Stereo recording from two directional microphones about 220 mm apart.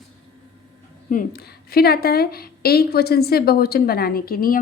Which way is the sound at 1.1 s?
40° left (ahead or behind).